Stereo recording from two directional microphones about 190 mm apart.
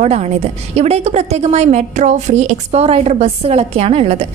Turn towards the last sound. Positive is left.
turn(degrees=-30)  # may be behind; listen again after turning